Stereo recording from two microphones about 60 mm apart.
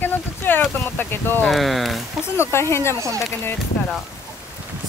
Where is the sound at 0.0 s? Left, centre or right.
Left.